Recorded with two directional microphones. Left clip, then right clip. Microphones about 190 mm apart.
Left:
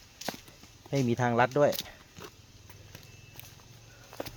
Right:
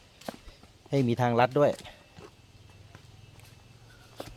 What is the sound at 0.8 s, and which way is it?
Speech, 20° right (ahead or behind).